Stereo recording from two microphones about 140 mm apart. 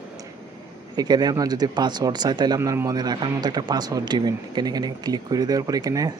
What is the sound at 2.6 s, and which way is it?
Speech, 20° right (ahead or behind).